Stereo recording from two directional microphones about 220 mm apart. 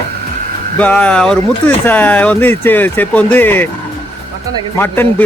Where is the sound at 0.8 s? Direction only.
5° left (ahead or behind).